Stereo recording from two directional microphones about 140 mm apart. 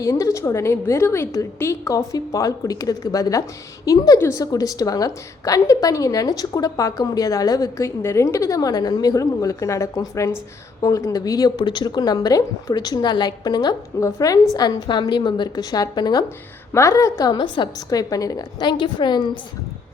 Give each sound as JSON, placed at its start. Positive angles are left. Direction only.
{"t": 0.0, "sound": "a woman's voice", "side_deg": 20}